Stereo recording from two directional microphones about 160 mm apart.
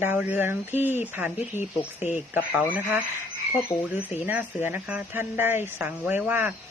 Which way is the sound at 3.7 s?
40° left (ahead or behind).